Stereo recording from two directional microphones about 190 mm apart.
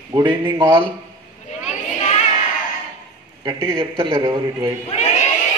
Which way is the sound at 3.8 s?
30° right (ahead or behind).